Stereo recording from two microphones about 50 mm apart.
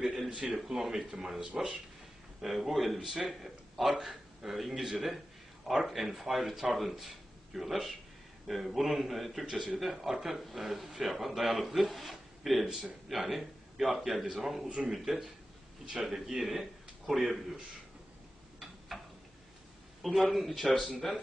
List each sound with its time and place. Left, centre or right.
0.0 s a sound: centre
0.3 s speech: centre
2.4 s a man's voice: centre
16.3 s speech: centre
20.1 s a man's voice: centre